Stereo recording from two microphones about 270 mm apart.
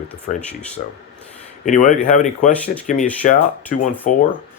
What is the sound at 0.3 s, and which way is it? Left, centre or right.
Speech, left.